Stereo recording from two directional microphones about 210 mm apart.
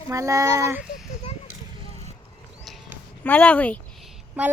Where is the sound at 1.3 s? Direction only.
30° left (ahead or behind).